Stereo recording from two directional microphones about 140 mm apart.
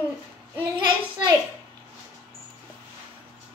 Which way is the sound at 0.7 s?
35° right (ahead or behind).